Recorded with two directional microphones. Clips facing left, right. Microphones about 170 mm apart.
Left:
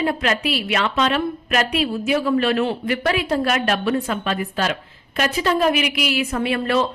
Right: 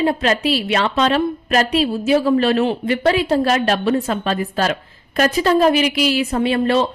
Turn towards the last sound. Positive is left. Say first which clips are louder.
# right 4 dB
turn(degrees=-30)  # may be behind; listen again after turning